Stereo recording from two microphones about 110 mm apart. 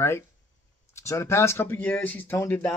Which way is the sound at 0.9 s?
25° left (ahead or behind).